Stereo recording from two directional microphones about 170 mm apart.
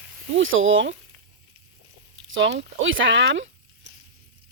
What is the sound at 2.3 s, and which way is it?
Speech, 90° right.